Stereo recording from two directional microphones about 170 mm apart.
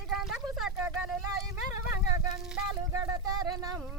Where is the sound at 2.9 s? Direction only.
20° right (ahead or behind).